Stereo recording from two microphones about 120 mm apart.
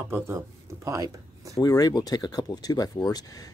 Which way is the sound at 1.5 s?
30° left (ahead or behind).